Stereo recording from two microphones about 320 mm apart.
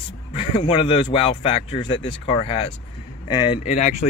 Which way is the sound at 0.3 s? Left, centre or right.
Centre.